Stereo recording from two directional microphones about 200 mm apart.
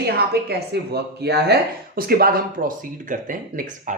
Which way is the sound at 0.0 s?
55° right (ahead or behind).